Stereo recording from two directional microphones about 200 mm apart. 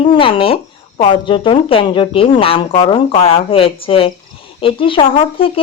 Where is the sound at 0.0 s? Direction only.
25° left (ahead or behind).